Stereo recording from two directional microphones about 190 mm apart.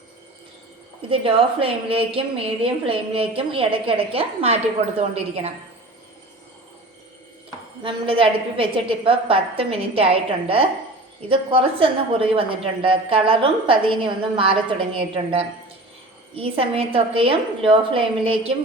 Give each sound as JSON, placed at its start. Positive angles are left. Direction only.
{"t": 1.1, "sound": "a woman's voice", "side_deg": -30}
{"t": 7.9, "sound": "a woman's voice", "side_deg": -30}